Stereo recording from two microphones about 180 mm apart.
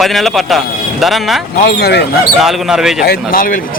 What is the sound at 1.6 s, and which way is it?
Speech, 65° left (ahead or behind).